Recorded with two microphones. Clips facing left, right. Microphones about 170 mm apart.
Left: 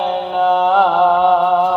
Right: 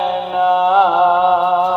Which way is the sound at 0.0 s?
Centre (ahead or behind).